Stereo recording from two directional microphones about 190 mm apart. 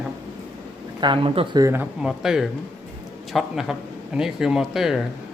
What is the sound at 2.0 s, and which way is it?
Speech, centre (ahead or behind).